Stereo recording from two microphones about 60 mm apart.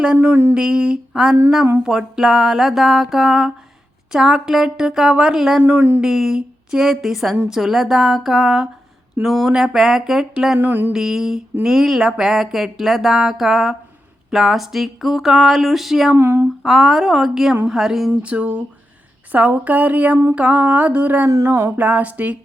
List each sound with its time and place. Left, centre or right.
0.2 s a sound: right
0.5 s a woman's voice: centre
5.6 s speech: right
6.0 s a woman's voice: centre
10.6 s speech: right
10.9 s a woman's voice: centre
16.1 s a sound: right
16.6 s a woman's voice: centre
18.2 s mantra: right